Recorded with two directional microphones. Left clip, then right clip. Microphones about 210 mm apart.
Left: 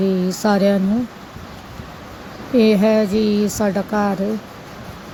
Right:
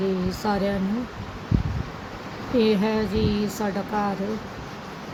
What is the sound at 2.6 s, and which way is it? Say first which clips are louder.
Speech: left 8 dB; 25° left (ahead or behind).